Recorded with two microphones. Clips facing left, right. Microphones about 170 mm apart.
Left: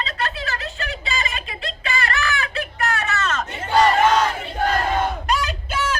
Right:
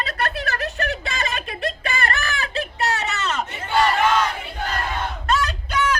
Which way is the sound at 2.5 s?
20° right (ahead or behind).